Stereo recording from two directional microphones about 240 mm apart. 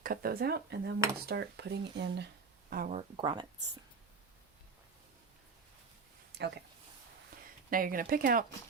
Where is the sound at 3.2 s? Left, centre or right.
Centre.